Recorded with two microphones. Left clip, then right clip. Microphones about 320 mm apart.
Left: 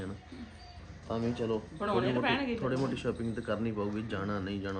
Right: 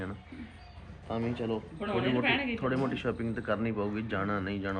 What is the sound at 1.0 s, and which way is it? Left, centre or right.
Speech, centre.